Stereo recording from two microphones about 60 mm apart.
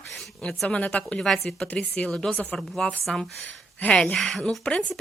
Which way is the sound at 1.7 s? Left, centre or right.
Centre.